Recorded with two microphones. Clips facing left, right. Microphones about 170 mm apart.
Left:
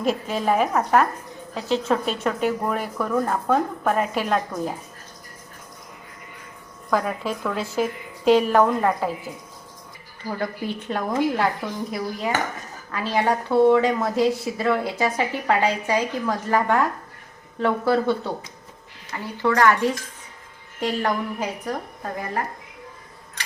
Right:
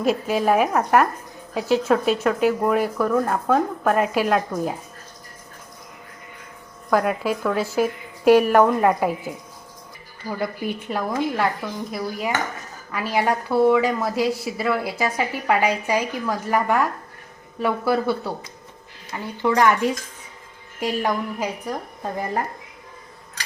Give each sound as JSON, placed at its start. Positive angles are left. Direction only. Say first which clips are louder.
{"t": 0.0, "sound": "a woman's voice", "louder": "right 3 dB", "side_deg": -5}
{"t": 6.9, "sound": "a woman's voice", "louder": "right 3 dB", "side_deg": -5}
{"t": 10.3, "sound": "a woman's voice", "louder": "right 2 dB", "side_deg": -10}
{"t": 12.9, "sound": "a woman's voice", "louder": "even", "side_deg": -10}